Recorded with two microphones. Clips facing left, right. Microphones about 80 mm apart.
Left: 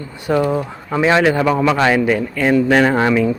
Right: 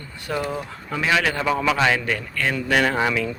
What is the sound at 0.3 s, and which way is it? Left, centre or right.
Speech, left.